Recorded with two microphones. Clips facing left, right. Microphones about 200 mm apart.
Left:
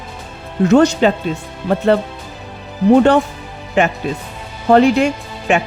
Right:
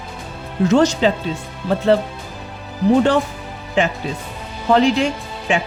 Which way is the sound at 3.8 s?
60° left (ahead or behind).